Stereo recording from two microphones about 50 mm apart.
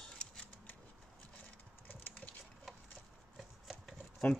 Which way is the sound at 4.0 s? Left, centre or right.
Left.